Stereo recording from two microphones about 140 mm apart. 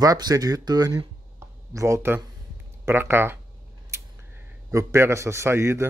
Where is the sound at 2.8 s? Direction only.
15° right (ahead or behind).